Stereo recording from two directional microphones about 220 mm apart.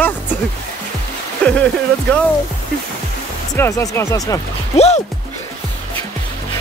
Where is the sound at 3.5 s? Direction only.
15° left (ahead or behind).